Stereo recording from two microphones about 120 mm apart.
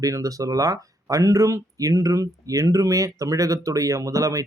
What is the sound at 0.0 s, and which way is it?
Speech, 30° right (ahead or behind).